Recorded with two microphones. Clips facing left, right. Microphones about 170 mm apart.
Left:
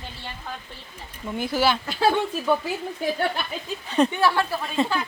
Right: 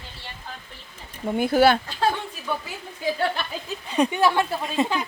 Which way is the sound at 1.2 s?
50° right (ahead or behind).